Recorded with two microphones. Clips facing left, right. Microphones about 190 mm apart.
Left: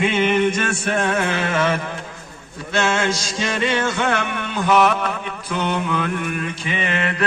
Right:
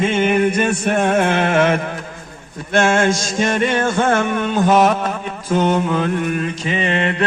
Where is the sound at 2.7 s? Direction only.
50° right (ahead or behind).